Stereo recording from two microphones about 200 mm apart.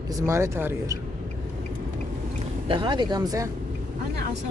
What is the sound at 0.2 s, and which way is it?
Speech, 15° right (ahead or behind).